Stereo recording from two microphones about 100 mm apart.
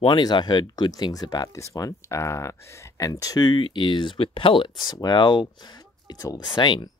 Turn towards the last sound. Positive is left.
turn(degrees=50)  # may be behind; listen again after turning